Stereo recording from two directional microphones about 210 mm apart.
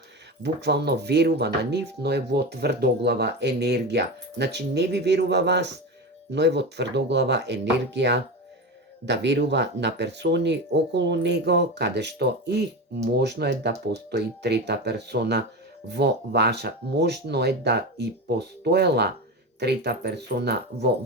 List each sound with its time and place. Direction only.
0.4 s speech: 55° right (ahead or behind)